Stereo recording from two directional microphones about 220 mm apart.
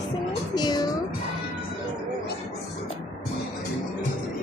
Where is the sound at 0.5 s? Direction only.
20° left (ahead or behind).